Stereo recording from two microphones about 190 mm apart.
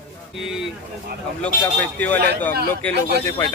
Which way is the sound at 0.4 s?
5° right (ahead or behind).